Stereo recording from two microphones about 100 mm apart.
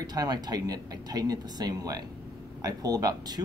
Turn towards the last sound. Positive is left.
turn(degrees=-40)  # may be behind; listen again after turning